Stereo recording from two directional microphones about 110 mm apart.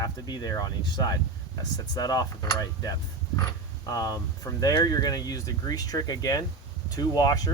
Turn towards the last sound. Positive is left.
turn(degrees=35)  # may be behind; listen again after turning